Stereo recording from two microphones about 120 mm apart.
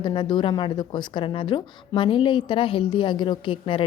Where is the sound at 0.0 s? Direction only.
40° left (ahead or behind).